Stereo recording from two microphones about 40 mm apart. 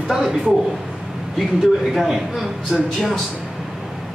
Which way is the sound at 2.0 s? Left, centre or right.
Centre.